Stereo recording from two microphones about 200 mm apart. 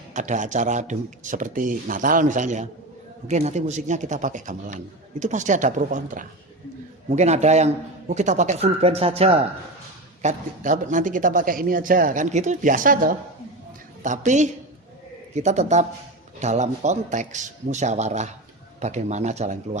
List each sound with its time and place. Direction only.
0.1 s speech: 40° right (ahead or behind)